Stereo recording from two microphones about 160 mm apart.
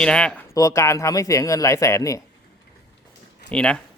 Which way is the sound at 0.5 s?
20° left (ahead or behind).